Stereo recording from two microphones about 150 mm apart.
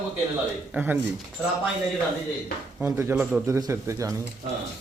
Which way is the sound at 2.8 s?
10° right (ahead or behind).